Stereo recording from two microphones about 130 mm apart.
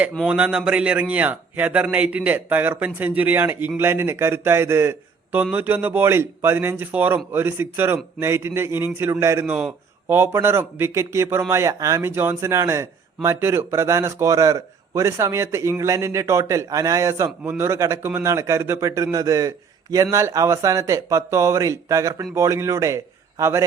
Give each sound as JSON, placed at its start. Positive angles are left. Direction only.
{"t": 0.3, "sound": "a man's voice", "side_deg": -10}